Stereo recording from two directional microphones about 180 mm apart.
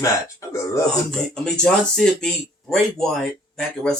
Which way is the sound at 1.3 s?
5° left (ahead or behind).